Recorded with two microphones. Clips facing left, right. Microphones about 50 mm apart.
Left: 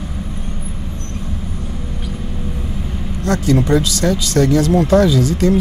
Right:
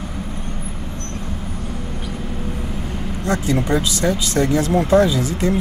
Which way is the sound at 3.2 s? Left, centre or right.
Right.